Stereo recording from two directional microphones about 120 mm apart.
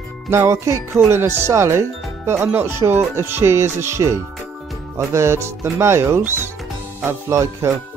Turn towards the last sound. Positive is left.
turn(degrees=-25)  # may be behind; listen again after turning